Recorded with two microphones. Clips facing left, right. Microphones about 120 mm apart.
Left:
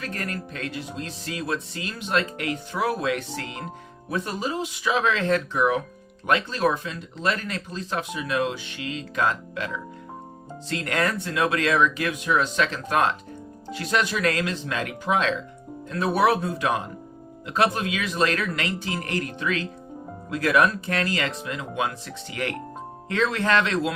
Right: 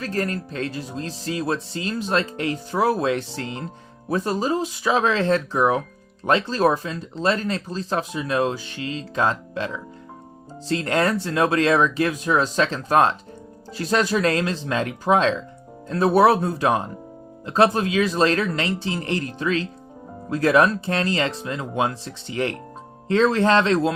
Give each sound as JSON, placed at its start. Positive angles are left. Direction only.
{"t": 0.0, "sound": "speech", "side_deg": -30}